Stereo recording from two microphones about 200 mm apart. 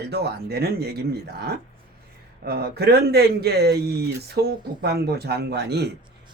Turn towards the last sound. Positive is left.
turn(degrees=-55)  # may be behind; listen again after turning